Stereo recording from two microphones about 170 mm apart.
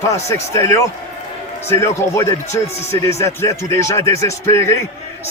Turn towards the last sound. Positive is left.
turn(degrees=15)  # may be behind; listen again after turning